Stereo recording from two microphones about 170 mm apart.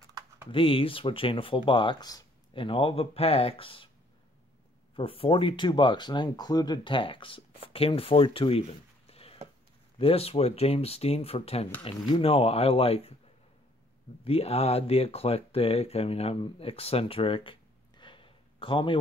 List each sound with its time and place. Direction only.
0.5 s speech: 30° left (ahead or behind)
4.9 s speech: 35° left (ahead or behind)
14.2 s speech: 35° left (ahead or behind)